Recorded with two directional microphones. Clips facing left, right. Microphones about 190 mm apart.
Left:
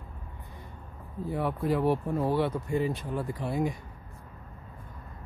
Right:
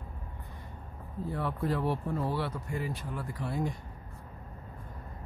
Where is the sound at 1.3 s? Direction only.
15° left (ahead or behind).